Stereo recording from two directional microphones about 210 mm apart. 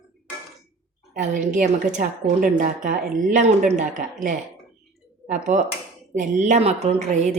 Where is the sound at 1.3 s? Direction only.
40° right (ahead or behind).